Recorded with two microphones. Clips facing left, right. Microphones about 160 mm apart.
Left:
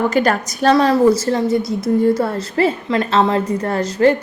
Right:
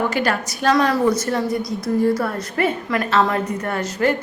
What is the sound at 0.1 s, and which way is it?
Speech, 45° left (ahead or behind).